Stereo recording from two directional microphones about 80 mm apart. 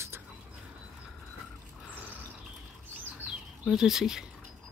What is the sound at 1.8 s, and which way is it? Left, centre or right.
Bird, centre.